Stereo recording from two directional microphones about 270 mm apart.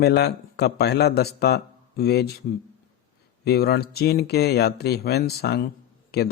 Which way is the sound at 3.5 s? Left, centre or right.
Left.